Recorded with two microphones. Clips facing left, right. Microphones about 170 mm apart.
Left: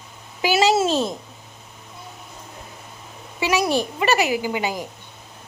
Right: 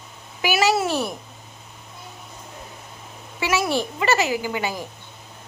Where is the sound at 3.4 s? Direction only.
15° left (ahead or behind).